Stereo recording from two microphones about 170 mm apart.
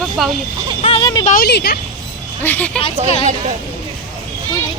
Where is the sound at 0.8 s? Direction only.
35° left (ahead or behind).